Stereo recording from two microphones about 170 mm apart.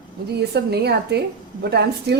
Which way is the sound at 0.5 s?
75° right (ahead or behind).